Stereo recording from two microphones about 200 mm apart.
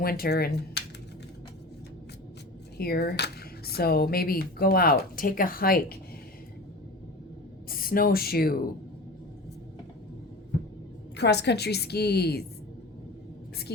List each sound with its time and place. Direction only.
0.0 s speech: 50° left (ahead or behind)
2.7 s speech: 50° left (ahead or behind)
7.7 s speech: 45° left (ahead or behind)
11.2 s speech: 55° left (ahead or behind)
13.7 s speech: 55° left (ahead or behind)